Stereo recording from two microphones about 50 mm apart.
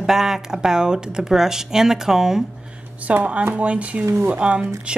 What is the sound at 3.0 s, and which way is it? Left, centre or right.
Speech, right.